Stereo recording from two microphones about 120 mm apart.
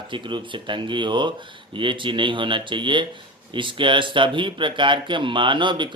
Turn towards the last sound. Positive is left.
turn(degrees=-40)  # may be behind; listen again after turning